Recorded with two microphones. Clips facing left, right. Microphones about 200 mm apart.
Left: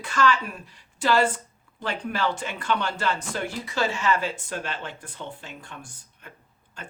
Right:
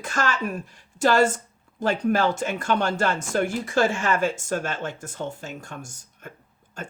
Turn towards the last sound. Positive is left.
turn(degrees=-45)  # may be behind; listen again after turning